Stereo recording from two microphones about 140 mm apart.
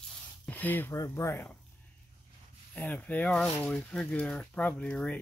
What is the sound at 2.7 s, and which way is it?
Speech, 10° left (ahead or behind).